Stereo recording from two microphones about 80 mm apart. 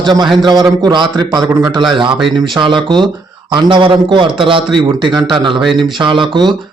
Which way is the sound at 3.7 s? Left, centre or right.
Right.